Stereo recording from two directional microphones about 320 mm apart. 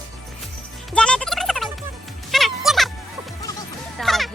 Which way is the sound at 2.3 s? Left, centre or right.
Centre.